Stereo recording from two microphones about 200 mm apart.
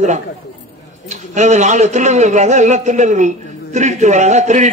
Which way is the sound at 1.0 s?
35° right (ahead or behind).